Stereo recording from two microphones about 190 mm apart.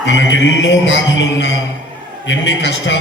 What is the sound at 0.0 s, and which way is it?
A man's voice, 75° left (ahead or behind).